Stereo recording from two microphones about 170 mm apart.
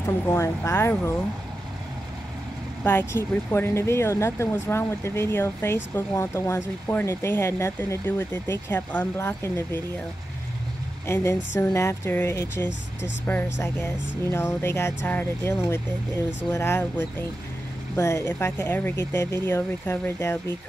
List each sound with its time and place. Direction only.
0.3 s speech: 15° left (ahead or behind)
2.8 s speech: 10° left (ahead or behind)
11.1 s speech: 15° left (ahead or behind)
17.9 s speech: 20° left (ahead or behind)